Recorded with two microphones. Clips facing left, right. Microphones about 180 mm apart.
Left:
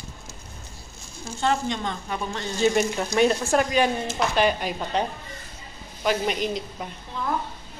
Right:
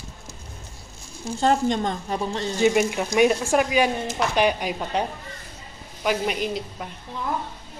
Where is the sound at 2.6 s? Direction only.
10° right (ahead or behind).